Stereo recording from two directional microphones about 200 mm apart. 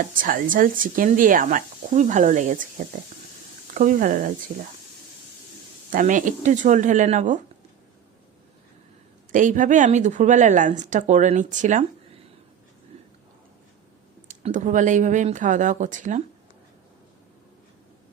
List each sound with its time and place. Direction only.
0.2 s speech: 45° right (ahead or behind)
5.9 s speech: 40° right (ahead or behind)
9.3 s speech: 40° right (ahead or behind)
14.3 s speech: 35° right (ahead or behind)